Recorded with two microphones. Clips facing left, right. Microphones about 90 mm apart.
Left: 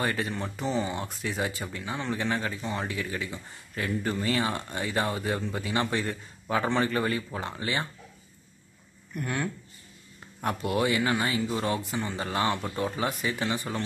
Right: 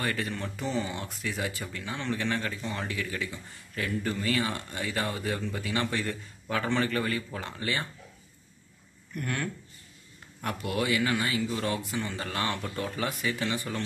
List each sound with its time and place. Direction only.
0.0 s speech: 25° left (ahead or behind)
9.1 s speech: 20° left (ahead or behind)